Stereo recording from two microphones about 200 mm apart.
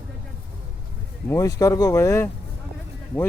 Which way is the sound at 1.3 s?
15° left (ahead or behind).